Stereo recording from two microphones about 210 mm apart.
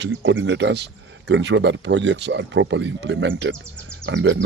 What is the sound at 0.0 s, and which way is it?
Speech, 60° right (ahead or behind).